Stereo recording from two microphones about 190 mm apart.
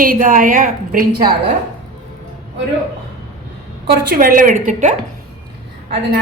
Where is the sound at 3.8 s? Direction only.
50° right (ahead or behind).